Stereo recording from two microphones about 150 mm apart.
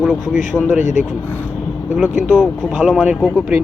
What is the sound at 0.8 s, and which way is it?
Speech, 55° left (ahead or behind).